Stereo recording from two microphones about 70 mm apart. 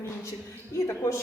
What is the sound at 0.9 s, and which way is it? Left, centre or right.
Speech, left.